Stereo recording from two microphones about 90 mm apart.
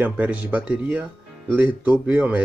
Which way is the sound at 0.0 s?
15° right (ahead or behind).